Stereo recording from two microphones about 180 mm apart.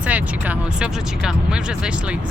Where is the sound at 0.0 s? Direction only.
10° right (ahead or behind).